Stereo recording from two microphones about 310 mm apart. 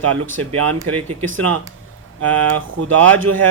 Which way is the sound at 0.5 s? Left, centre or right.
Right.